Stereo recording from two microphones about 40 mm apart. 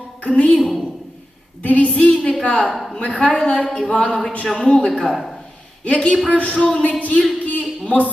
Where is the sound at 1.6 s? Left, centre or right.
Left.